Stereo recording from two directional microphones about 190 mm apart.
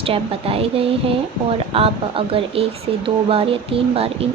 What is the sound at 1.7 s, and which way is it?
Speech, 30° right (ahead or behind).